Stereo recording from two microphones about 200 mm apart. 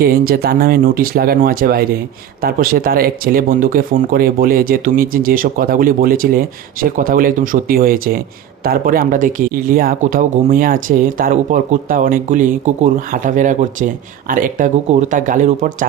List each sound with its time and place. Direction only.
0.0 s speech: 50° right (ahead or behind)